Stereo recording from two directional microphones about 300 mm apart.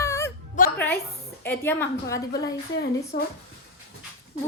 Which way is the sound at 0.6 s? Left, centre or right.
Left.